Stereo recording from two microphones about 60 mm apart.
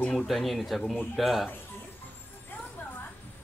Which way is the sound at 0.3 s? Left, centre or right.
Centre.